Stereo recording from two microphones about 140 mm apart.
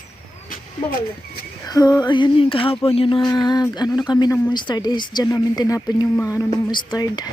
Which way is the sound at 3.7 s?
30° left (ahead or behind).